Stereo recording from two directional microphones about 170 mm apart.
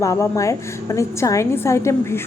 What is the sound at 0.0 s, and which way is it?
A woman's voice, 20° left (ahead or behind).